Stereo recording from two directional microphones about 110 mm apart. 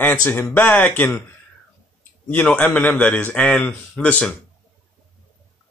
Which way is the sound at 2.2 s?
15° left (ahead or behind).